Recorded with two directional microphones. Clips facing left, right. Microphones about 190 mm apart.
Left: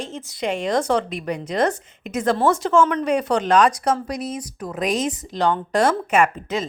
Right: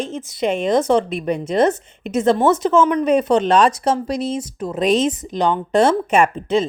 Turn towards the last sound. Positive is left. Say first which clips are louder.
# right 4 dB
turn(degrees=-30)  # may be behind; listen again after turning